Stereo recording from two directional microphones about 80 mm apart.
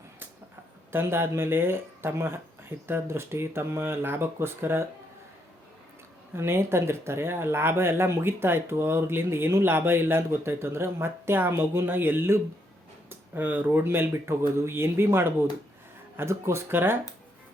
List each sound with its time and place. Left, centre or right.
0.9 s speech: right
6.3 s speech: right